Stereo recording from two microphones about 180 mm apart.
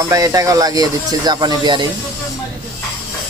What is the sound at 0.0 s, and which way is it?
Speech, 20° right (ahead or behind).